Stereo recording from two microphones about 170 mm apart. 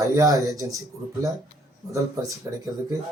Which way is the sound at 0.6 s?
20° right (ahead or behind).